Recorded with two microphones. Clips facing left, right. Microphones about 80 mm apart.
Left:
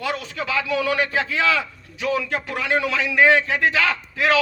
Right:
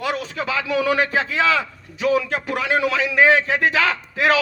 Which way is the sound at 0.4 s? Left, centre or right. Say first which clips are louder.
Right 2 dB; right.